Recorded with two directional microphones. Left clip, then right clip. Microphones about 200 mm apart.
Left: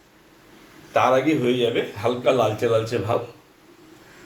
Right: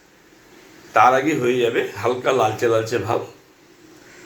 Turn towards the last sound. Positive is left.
turn(degrees=5)  # may be behind; listen again after turning